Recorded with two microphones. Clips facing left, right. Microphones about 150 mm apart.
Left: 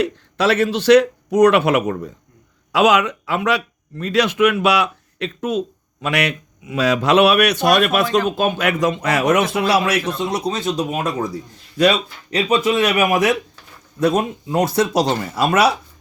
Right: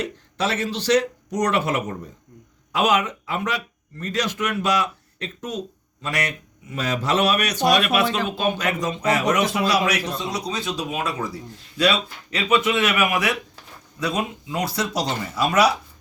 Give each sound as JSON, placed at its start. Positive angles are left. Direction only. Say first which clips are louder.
{"t": 0.0, "sound": "speech", "louder": "left 7 dB", "side_deg": 70}
{"t": 2.7, "sound": "speech", "louder": "left 5 dB", "side_deg": 85}